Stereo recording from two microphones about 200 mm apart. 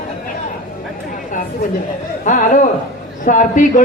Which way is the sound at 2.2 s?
40° left (ahead or behind).